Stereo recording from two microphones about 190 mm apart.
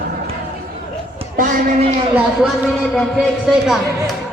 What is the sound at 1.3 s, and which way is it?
Speech, 45° right (ahead or behind).